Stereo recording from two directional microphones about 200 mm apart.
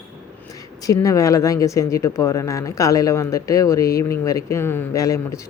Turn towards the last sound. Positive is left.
turn(degrees=15)  # may be behind; listen again after turning